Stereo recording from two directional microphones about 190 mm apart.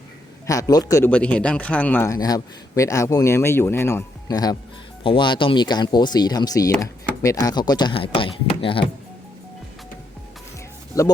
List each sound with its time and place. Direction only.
0.4 s speech: 20° left (ahead or behind)
10.9 s speech: 20° left (ahead or behind)